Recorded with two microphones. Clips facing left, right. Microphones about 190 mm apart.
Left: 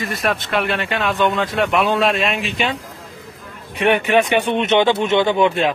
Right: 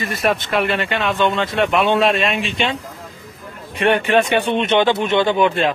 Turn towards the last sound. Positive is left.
turn(degrees=20)  # may be behind; listen again after turning